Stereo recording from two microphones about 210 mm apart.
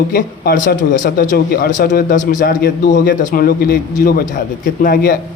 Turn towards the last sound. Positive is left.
turn(degrees=45)  # may be behind; listen again after turning